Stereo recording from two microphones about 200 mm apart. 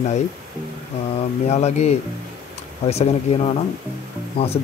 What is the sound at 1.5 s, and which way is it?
Speech, 35° left (ahead or behind).